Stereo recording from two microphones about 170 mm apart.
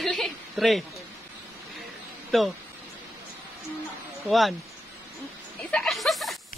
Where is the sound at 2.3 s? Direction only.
Centre (ahead or behind).